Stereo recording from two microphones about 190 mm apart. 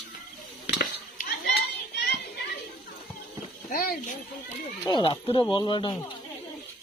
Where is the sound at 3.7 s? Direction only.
50° left (ahead or behind).